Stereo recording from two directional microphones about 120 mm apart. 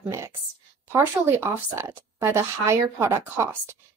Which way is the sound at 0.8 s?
20° right (ahead or behind).